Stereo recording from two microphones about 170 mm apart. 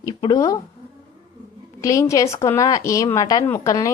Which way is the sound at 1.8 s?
20° left (ahead or behind).